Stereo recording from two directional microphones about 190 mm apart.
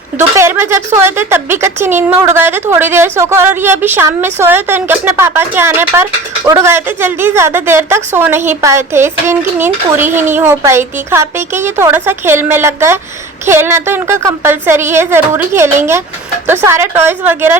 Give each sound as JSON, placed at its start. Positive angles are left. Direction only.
{"t": 0.2, "sound": "a woman's voice", "side_deg": -15}